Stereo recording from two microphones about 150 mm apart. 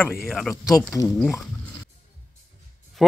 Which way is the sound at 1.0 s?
20° left (ahead or behind).